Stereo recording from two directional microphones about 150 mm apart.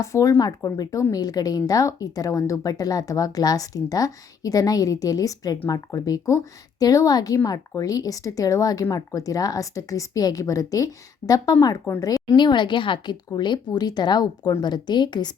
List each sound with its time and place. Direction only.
0.0 s a woman's voice: 20° left (ahead or behind)